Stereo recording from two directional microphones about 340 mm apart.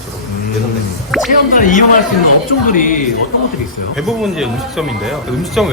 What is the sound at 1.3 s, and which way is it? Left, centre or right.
Speech, left.